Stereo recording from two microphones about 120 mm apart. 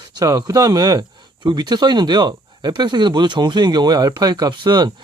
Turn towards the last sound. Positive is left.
turn(degrees=-35)  # may be behind; listen again after turning